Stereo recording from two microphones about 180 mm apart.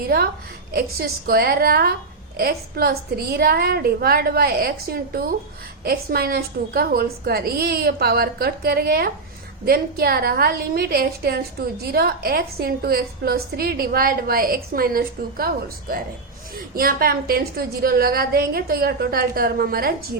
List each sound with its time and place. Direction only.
0.0 s a woman's voice: 55° right (ahead or behind)